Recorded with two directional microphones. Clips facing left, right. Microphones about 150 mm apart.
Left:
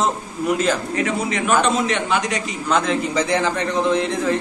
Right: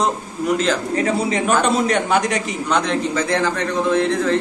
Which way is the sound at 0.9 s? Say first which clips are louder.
Right 3 dB; 35° right (ahead or behind).